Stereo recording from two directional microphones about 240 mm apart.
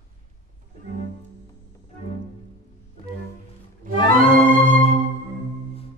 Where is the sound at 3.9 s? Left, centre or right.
Right.